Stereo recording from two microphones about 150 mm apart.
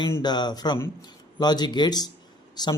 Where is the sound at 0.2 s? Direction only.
30° left (ahead or behind).